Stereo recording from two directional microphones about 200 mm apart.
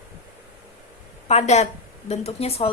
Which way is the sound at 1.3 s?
35° left (ahead or behind).